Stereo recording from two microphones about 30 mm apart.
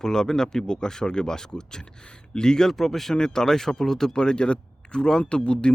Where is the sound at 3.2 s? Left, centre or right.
Left.